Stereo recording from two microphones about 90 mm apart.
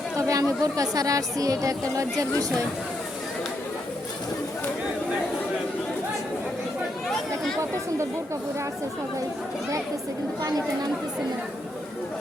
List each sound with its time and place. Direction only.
0.2 s speech: 40° right (ahead or behind)